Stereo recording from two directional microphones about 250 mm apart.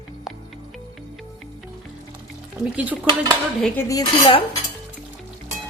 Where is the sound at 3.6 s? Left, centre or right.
Centre.